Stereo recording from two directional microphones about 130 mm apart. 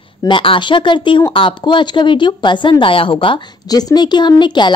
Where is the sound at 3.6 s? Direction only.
30° left (ahead or behind).